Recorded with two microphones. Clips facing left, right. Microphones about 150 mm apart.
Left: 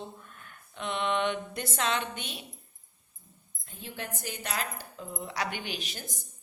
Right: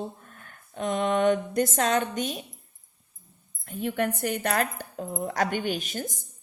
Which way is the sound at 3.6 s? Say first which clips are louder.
Right 13 dB; 60° right (ahead or behind).